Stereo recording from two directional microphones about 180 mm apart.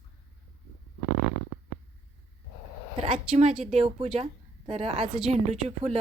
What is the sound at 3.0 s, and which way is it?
Speech, 40° right (ahead or behind).